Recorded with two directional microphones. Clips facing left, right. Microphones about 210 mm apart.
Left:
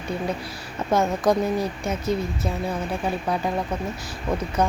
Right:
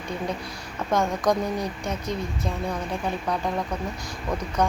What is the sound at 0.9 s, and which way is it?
A woman's voice, 5° left (ahead or behind).